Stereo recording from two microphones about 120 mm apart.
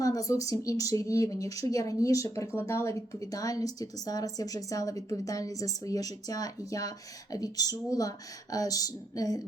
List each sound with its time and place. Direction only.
0.0 s speech: 30° left (ahead or behind)